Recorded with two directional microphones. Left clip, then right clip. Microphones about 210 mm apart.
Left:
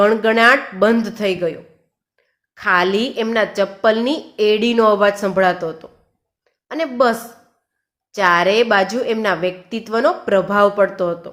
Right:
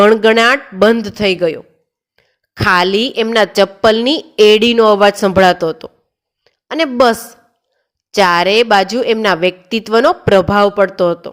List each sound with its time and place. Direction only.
0.0 s a woman's voice: 45° right (ahead or behind)
6.4 s a sound: 40° right (ahead or behind)
8.1 s a woman's voice: 45° right (ahead or behind)